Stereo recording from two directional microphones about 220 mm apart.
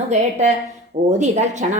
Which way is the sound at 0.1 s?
30° right (ahead or behind).